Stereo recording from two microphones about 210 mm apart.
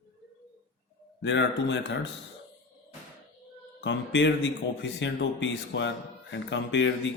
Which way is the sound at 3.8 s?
60° left (ahead or behind).